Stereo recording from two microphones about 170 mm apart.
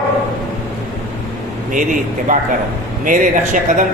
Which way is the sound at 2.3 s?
50° right (ahead or behind).